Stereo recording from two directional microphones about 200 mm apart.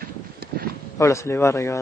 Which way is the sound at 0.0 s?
45° right (ahead or behind).